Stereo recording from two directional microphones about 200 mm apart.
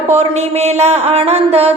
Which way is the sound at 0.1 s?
30° right (ahead or behind).